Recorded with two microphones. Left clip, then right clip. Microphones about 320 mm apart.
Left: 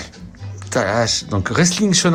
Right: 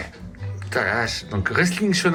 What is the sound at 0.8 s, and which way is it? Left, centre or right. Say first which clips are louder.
Speech: left 5 dB; left.